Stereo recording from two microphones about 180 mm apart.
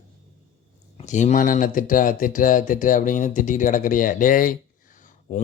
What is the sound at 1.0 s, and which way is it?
Speech, 45° left (ahead or behind).